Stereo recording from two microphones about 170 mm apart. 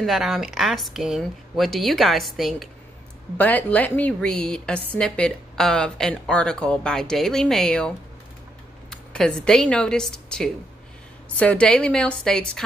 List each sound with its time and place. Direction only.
0.0 s a woman's voice: centre (ahead or behind)
8.9 s a woman's voice: 5° left (ahead or behind)